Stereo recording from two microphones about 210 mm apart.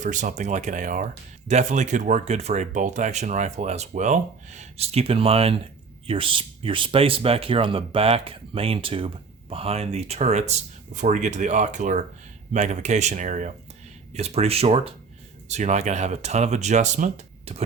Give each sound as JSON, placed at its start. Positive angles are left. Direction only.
{"t": 0.0, "sound": "speech", "side_deg": -35}